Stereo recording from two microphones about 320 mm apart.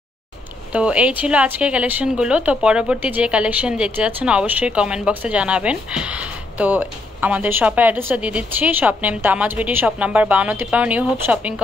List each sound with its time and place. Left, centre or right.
0.7 s speech: centre